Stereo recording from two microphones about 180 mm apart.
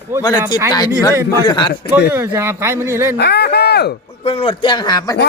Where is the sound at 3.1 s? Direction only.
65° left (ahead or behind).